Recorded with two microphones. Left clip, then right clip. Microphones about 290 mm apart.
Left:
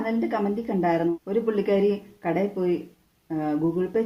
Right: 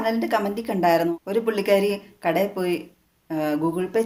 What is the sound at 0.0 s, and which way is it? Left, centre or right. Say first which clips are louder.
Speech: right 4 dB; right.